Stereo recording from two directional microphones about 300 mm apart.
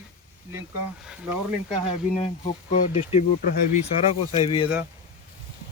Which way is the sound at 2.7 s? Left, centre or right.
Left.